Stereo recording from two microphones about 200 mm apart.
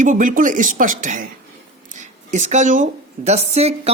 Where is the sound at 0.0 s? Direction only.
40° right (ahead or behind).